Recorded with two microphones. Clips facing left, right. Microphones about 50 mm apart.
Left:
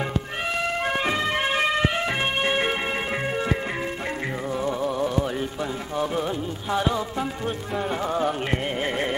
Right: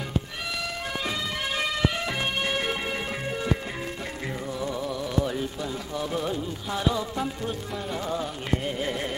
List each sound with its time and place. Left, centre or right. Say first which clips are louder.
0.6 s music: left 8 dB; left
4.6 s music: left 7 dB; left